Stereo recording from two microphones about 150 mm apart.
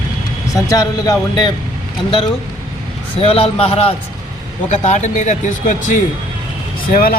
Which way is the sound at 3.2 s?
40° left (ahead or behind).